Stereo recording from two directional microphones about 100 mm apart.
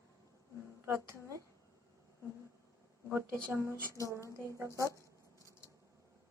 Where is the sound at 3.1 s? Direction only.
25° right (ahead or behind).